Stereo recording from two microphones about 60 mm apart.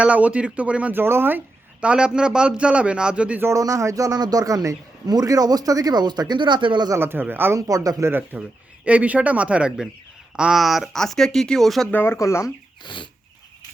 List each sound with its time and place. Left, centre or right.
0.0 s speech: right
0.9 s speech: right
1.8 s a man's voice: centre
3.5 s a man's voice: right
7.0 s speech: right
7.7 s a man's voice: right
8.4 s speech: right
10.6 s speech: centre
10.9 s speech: centre
11.9 s speech: left
12.1 s speech: left